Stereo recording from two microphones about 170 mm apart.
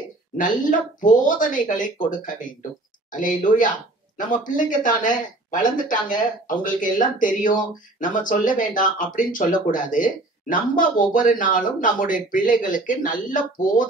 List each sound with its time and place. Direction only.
0.4 s speech: 50° left (ahead or behind)